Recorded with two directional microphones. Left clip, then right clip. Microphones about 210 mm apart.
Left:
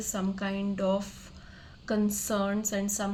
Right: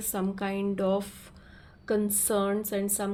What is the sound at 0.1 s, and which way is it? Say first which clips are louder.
Speech: right 3 dB; 35° right (ahead or behind).